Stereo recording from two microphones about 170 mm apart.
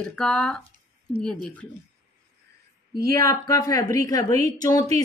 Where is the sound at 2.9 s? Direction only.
20° left (ahead or behind).